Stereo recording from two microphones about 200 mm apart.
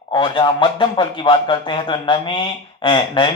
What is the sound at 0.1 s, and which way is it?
Speech, 25° left (ahead or behind).